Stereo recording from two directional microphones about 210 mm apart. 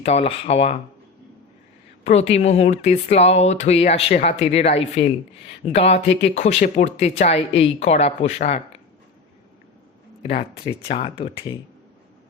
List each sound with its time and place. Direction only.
0.0 s speech: 30° left (ahead or behind)
2.0 s speech: 30° left (ahead or behind)
10.2 s speech: 30° left (ahead or behind)